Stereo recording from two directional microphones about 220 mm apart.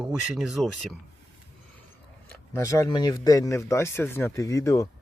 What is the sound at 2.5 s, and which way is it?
Speech, 15° left (ahead or behind).